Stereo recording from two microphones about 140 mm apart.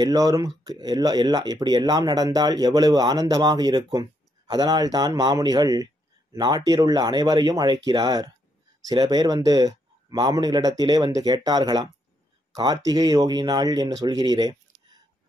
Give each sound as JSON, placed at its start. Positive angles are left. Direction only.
{"t": 0.0, "sound": "speech", "side_deg": -25}